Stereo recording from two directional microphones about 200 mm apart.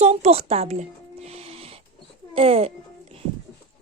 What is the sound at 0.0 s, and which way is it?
Speech, 30° right (ahead or behind).